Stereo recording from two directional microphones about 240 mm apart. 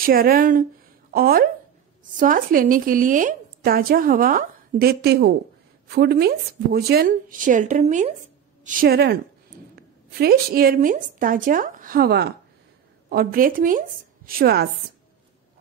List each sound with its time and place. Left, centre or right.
0.0 s speech: right